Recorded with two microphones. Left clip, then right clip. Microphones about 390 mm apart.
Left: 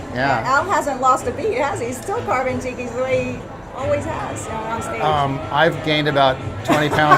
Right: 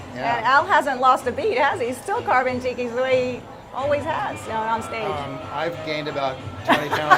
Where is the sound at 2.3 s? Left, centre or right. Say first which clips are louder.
Right 1 dB; right.